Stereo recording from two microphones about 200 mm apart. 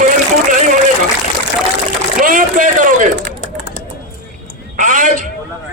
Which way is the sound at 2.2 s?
40° right (ahead or behind).